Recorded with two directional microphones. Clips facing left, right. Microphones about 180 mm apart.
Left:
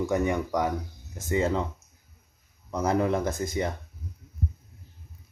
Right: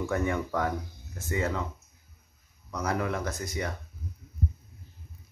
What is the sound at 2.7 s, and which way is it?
Speech, 25° left (ahead or behind).